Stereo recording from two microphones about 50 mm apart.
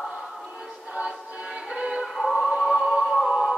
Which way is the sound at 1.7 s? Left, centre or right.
Centre.